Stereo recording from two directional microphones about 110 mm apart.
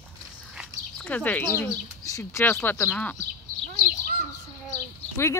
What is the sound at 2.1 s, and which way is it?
Speech, 30° left (ahead or behind).